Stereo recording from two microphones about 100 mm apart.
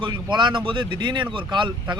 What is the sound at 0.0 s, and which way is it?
Speech, 50° right (ahead or behind).